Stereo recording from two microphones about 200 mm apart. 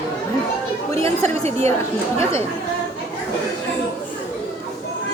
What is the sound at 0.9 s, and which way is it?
Speech, 30° right (ahead or behind).